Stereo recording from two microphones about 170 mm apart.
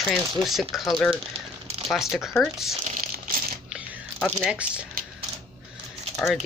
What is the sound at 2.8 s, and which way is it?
Crumpling, 60° right (ahead or behind).